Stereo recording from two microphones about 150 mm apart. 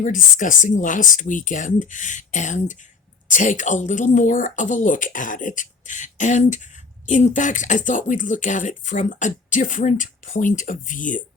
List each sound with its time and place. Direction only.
0.0 s speech: 60° left (ahead or behind)